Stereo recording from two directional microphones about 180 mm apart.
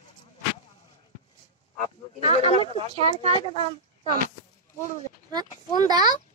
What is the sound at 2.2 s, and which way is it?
Speech, 35° left (ahead or behind).